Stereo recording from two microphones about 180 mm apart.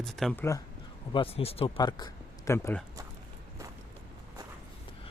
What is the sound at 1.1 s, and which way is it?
Speech, 30° left (ahead or behind).